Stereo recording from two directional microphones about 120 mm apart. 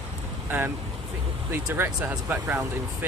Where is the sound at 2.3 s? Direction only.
20° right (ahead or behind).